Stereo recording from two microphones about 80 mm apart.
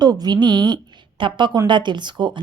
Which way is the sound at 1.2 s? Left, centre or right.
Right.